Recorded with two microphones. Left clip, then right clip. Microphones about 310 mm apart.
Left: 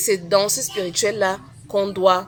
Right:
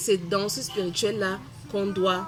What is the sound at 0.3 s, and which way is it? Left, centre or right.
Speech, centre.